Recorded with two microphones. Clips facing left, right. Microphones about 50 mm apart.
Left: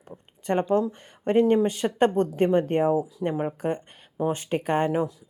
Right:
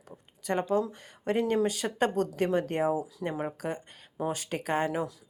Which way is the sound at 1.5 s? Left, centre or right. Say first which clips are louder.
Left 6 dB; left.